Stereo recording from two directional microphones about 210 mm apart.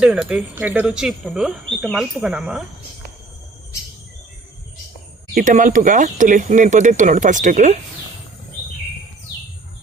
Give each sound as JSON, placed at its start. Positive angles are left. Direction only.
{"t": 0.0, "sound": "speech", "side_deg": -5}
{"t": 5.3, "sound": "speech", "side_deg": -40}